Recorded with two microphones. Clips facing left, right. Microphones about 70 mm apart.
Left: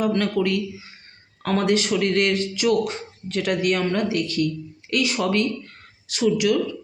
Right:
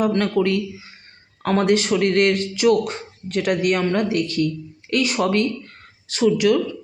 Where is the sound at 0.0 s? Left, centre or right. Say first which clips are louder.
Right 2 dB; right.